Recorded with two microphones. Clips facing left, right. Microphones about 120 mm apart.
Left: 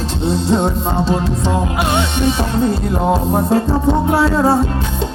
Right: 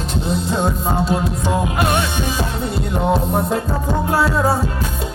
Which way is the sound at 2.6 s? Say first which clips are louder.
Left 3 dB; 35° left (ahead or behind).